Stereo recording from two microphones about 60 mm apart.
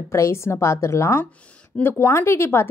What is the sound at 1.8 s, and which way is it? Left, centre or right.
Speech, left.